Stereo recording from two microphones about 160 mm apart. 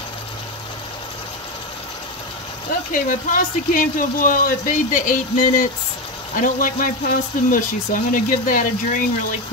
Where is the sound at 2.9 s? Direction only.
55° left (ahead or behind).